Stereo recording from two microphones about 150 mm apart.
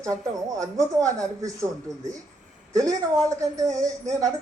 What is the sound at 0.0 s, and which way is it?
Speech, 20° right (ahead or behind).